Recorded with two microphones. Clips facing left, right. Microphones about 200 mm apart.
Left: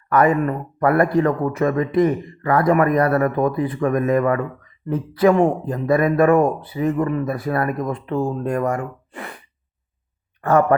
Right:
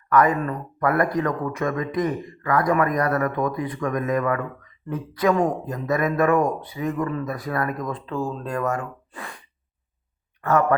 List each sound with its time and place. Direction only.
0.1 s speech: 25° left (ahead or behind)
8.8 s gasp: 30° left (ahead or behind)
10.4 s speech: 30° left (ahead or behind)